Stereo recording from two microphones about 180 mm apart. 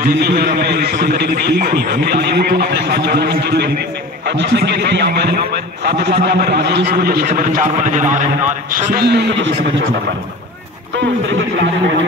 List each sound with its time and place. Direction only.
0.0 s a man's voice: 55° right (ahead or behind)
7.2 s a man's voice: 45° right (ahead or behind)
8.7 s a man's voice: 60° right (ahead or behind); by 9.8 s 80° right